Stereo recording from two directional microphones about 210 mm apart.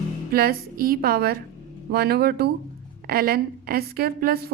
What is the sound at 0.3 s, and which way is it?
A woman's voice, 45° right (ahead or behind).